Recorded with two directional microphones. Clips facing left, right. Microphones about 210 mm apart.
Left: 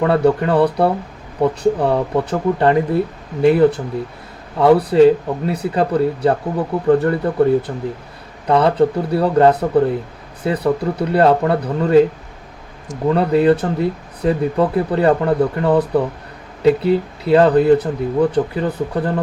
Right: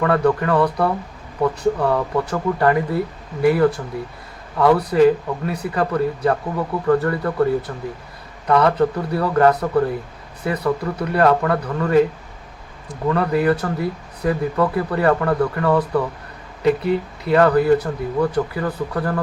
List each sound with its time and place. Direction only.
0.0 s speech: 25° left (ahead or behind)
13.1 s speech: 25° left (ahead or behind)